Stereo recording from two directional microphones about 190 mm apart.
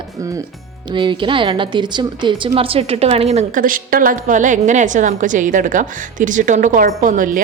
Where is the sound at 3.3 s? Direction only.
45° right (ahead or behind).